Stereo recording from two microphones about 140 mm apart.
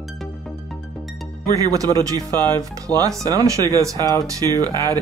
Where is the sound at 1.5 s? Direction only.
25° right (ahead or behind).